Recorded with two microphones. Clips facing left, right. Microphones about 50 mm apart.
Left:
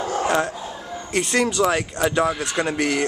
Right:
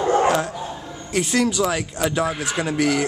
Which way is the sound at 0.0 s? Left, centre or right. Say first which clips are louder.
Right 6 dB; right.